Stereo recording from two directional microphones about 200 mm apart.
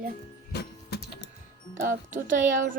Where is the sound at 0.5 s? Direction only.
55° left (ahead or behind).